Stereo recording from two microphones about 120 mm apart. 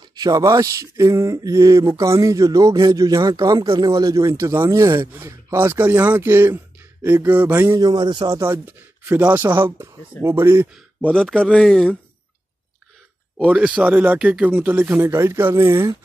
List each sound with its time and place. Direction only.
0.0 s speech: 35° right (ahead or behind)
3.6 s speech: 45° right (ahead or behind)
3.9 s speech: 30° right (ahead or behind)
7.7 s speech: 35° right (ahead or behind)
8.4 s speech: 20° right (ahead or behind)
11.1 s speech: 5° left (ahead or behind)
13.5 s speech: 10° right (ahead or behind)